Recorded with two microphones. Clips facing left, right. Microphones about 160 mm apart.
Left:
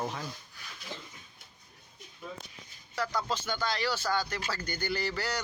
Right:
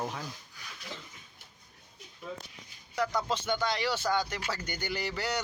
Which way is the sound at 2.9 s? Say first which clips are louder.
Right 2 dB; 20° right (ahead or behind).